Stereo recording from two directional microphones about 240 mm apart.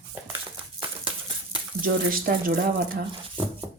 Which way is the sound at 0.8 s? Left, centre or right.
Right.